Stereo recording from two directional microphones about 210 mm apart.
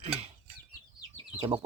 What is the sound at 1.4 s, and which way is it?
Speech, 20° right (ahead or behind).